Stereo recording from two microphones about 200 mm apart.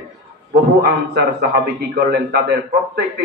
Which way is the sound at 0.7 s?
50° right (ahead or behind).